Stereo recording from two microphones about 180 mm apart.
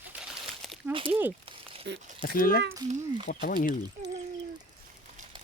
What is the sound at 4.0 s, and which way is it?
Speech, 40° right (ahead or behind).